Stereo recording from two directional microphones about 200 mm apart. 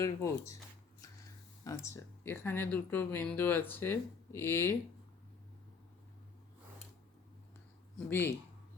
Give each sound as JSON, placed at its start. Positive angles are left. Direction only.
{"t": 0.0, "sound": "speech", "side_deg": 15}
{"t": 7.9, "sound": "speech", "side_deg": 10}